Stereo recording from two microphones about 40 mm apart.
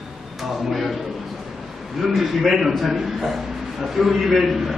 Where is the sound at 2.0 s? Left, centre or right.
Centre.